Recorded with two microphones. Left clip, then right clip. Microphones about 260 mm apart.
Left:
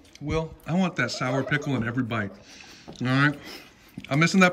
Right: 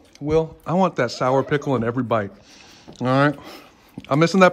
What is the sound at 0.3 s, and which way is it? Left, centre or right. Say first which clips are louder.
Speech: right 9 dB; right.